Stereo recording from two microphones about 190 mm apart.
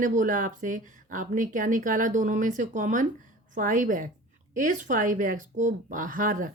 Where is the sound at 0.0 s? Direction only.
45° right (ahead or behind).